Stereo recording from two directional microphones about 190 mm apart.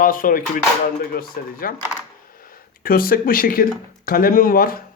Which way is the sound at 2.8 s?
50° left (ahead or behind).